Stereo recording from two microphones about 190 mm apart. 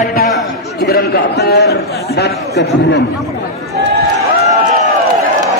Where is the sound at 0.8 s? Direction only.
55° left (ahead or behind).